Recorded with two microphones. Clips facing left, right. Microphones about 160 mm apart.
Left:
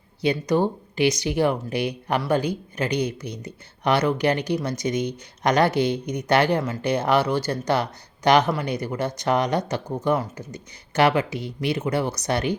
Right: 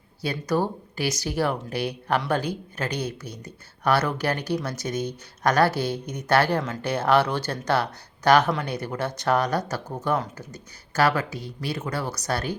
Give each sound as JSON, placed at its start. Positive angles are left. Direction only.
{"t": 0.2, "sound": "speech", "side_deg": 20}